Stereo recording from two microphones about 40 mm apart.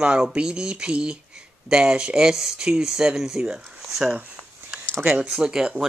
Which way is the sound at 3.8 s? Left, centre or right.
Centre.